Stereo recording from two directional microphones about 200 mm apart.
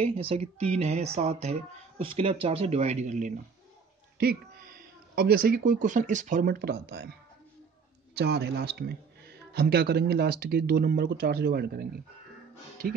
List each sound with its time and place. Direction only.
0.0 s speech: 30° right (ahead or behind)
4.2 s speech: 45° right (ahead or behind)